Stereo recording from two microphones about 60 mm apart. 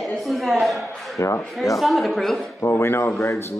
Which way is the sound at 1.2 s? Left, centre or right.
Left.